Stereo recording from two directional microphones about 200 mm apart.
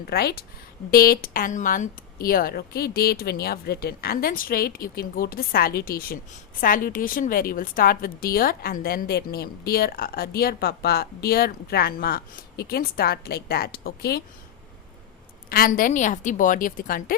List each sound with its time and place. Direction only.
0.1 s a woman's voice: 50° left (ahead or behind)
15.4 s a woman's voice: 45° left (ahead or behind)